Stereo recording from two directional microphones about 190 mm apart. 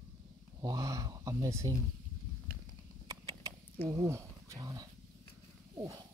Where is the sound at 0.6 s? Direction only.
20° right (ahead or behind).